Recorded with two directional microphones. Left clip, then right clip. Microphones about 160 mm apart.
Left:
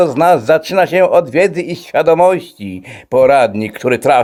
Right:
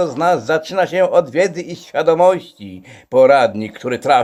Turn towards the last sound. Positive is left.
turn(degrees=45)  # may be behind; listen again after turning